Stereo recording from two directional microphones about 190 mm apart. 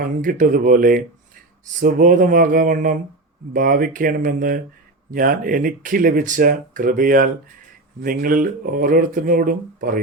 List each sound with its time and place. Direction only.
0.0 s speech: 45° right (ahead or behind)